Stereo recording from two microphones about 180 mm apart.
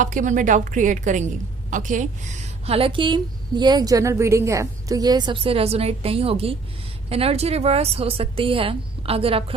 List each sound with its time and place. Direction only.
0.0 s a woman's voice: 45° right (ahead or behind)